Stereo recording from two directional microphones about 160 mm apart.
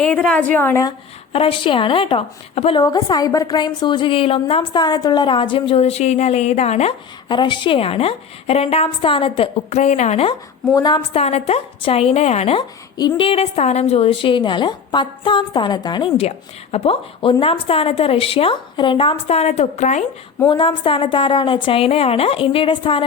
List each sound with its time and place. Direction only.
0.0 s a woman's voice: 5° left (ahead or behind)
1.3 s a woman's voice: 35° left (ahead or behind)
2.8 s a woman's voice: 25° left (ahead or behind); by 6.9 s 45° left (ahead or behind)
7.3 s a woman's voice: 30° left (ahead or behind)
10.8 s a woman's voice: 25° left (ahead or behind)
11.1 s a woman's voice: 40° left (ahead or behind)
13.0 s a woman's voice: 30° left (ahead or behind); by 20.1 s 45° left (ahead or behind)
20.5 s a woman's voice: 30° left (ahead or behind)